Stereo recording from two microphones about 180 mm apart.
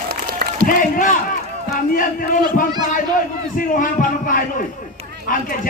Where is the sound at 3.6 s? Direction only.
50° left (ahead or behind).